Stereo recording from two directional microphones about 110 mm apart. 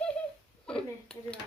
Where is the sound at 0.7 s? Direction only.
10° left (ahead or behind).